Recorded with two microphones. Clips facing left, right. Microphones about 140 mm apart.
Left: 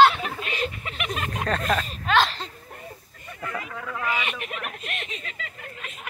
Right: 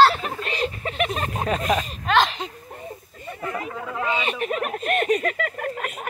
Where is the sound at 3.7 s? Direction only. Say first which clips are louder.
Right 2 dB; 25° right (ahead or behind); by 5.7 s 60° right (ahead or behind).